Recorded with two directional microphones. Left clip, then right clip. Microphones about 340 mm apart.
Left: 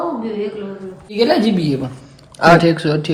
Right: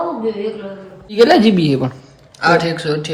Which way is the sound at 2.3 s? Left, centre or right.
Centre.